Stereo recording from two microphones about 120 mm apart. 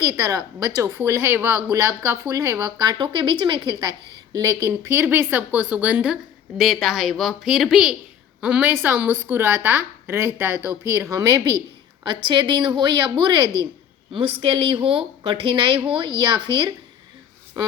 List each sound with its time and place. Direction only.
0.0 s a woman's voice: 30° right (ahead or behind)